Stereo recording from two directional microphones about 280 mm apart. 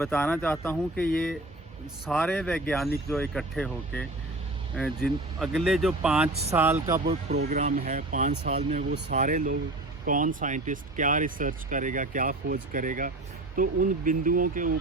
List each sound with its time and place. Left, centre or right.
0.0 s speech: centre
6.9 s speech: right